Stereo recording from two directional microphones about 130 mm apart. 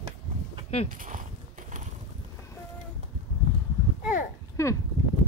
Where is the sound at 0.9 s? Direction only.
85° right.